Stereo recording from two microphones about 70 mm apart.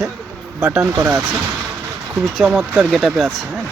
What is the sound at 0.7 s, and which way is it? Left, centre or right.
Speech, right.